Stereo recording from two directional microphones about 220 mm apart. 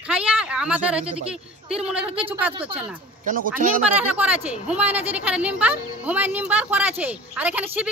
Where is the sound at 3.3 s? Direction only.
40° right (ahead or behind).